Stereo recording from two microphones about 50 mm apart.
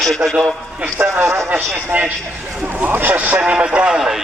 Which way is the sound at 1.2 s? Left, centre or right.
Right.